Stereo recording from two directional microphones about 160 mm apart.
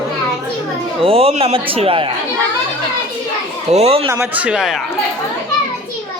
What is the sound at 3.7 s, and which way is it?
Speech, 40° right (ahead or behind).